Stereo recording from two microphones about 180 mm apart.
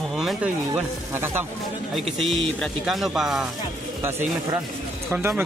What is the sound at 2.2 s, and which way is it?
Speech, centre (ahead or behind).